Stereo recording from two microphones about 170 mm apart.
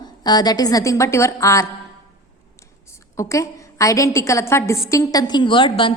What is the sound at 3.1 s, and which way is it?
A woman's voice, 20° left (ahead or behind).